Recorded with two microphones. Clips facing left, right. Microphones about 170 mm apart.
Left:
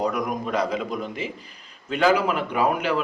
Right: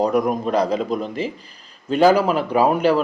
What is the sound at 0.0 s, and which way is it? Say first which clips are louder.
Speech: right 7 dB; 30° right (ahead or behind).